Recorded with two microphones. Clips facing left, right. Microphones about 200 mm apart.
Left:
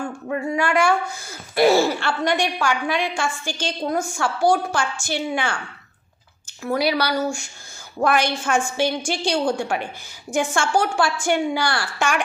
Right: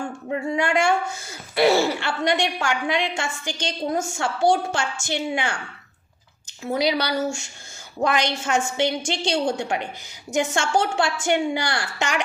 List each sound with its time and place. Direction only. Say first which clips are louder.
0.3 s a woman's voice: left 1 dB; 20° right (ahead or behind)
6.6 s a woman's voice: left 1 dB; 20° right (ahead or behind)